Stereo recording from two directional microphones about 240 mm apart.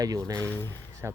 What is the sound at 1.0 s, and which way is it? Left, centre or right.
Speech, centre.